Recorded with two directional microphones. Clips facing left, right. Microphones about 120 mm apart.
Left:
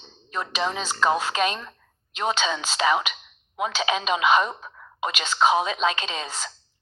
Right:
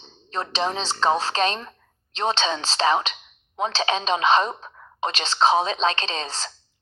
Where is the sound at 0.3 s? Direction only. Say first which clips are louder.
Right 2 dB; 35° right (ahead or behind).